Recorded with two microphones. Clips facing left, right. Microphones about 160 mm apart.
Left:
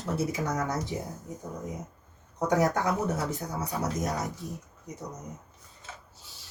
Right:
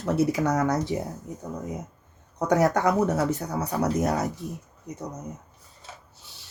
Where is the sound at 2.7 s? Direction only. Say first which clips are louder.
Right 6 dB; 70° right (ahead or behind).